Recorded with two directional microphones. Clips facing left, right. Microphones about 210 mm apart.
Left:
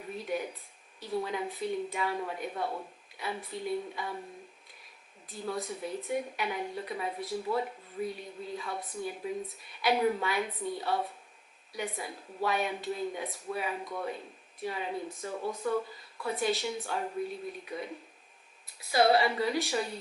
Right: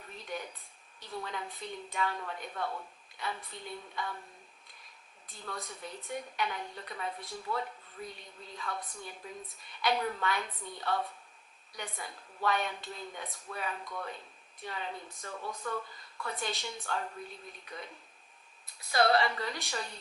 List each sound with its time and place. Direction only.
0.2 s a sound: 5° left (ahead or behind)
1.2 s speech: 10° left (ahead or behind)
5.3 s speech: 5° left (ahead or behind)
16.2 s speech: 5° left (ahead or behind)
18.8 s speech: 5° left (ahead or behind)